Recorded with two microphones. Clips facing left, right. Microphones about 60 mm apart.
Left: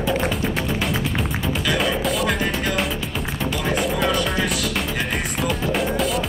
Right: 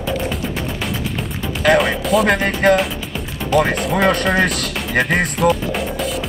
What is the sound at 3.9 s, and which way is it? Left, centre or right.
Speech, right.